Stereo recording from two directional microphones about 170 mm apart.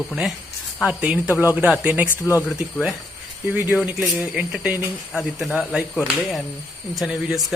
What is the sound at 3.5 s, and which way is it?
Speech, 10° right (ahead or behind).